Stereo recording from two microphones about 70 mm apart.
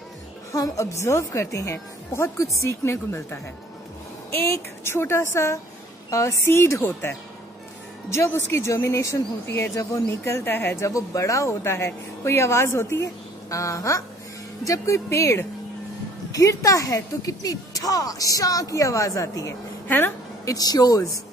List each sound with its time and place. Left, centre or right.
0.5 s speech: left
2.8 s speech: left
4.4 s speech: left
10.8 s speech: left
20.4 s speech: left